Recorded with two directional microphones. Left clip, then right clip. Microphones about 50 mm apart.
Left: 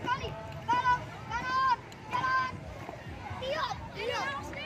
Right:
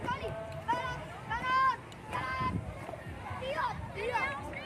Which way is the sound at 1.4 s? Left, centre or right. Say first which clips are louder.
Even; right.